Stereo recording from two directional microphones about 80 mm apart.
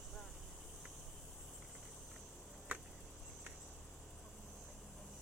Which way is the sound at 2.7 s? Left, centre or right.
Centre.